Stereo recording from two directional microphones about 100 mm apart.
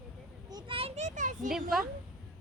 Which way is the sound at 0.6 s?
70° right (ahead or behind).